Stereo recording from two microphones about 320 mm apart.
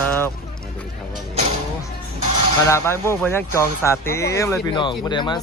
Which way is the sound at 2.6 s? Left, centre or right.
Centre.